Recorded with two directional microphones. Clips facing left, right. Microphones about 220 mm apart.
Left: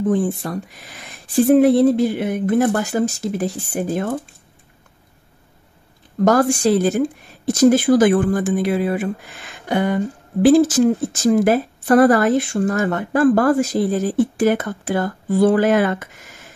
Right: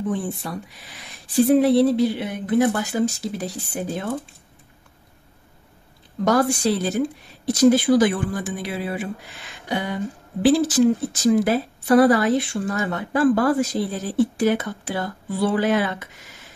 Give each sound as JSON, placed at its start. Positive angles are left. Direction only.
{"t": 0.0, "sound": "speech", "side_deg": 45}
{"t": 6.2, "sound": "speech", "side_deg": 45}